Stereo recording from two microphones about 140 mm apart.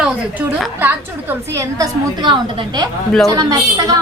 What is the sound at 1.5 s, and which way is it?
A woman's voice, 30° right (ahead or behind).